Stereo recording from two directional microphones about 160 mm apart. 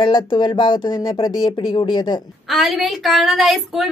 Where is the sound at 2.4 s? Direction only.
Centre (ahead or behind).